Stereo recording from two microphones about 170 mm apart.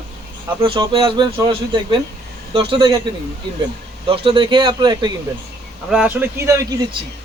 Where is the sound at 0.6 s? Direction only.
30° right (ahead or behind).